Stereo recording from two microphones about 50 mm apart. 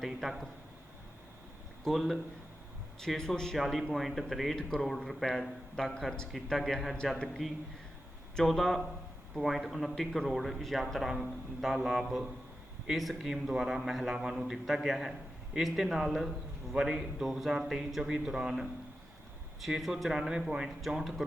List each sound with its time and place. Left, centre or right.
0.0 s a man's voice: centre
1.8 s a man's voice: centre
3.6 s a man's voice: centre